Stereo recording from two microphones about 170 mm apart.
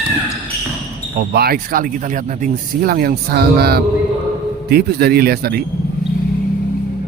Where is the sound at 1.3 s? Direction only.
65° right (ahead or behind).